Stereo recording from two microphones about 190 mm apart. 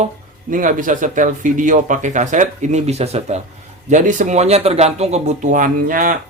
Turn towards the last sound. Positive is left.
turn(degrees=-45)  # may be behind; listen again after turning